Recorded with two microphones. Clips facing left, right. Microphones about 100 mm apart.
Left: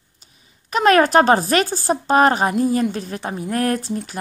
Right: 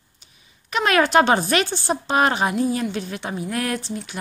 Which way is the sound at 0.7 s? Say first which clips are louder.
Left 4 dB; 40° left (ahead or behind).